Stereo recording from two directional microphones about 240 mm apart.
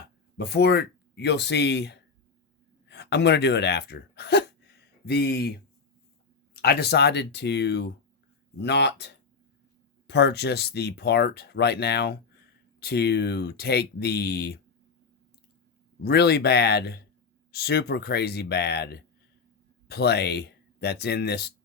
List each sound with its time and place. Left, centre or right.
0.3 s speech: left
6.6 s speech: left
16.0 s speech: left